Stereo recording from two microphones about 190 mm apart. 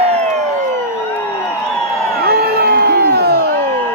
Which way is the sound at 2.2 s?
55° right (ahead or behind).